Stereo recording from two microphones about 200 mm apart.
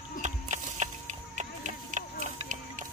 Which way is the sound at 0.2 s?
35° right (ahead or behind).